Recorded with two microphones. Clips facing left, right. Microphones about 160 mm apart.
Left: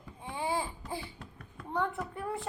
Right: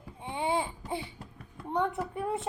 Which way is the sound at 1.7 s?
20° right (ahead or behind).